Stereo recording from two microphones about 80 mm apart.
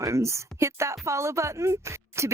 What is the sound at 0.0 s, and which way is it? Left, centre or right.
Speech, right.